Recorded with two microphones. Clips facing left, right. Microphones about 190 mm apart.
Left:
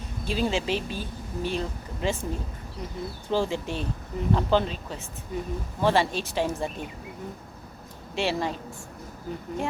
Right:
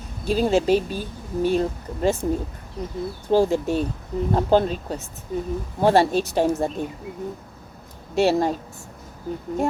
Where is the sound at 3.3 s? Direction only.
45° right (ahead or behind).